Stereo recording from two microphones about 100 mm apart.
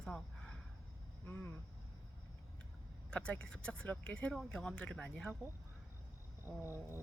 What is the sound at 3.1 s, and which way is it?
Speech, 10° left (ahead or behind).